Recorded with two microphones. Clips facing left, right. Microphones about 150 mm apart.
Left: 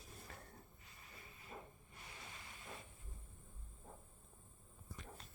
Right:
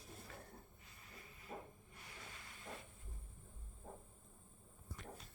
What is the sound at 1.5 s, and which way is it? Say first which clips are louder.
Hiss: right 3 dB; 60° right (ahead or behind).